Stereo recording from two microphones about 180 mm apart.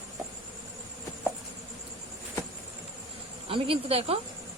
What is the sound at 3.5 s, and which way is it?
Speech, 30° right (ahead or behind).